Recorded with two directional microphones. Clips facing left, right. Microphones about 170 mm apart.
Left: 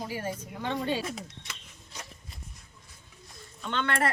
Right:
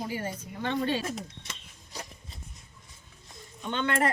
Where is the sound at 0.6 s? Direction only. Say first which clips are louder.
Right 2 dB; 5° left (ahead or behind).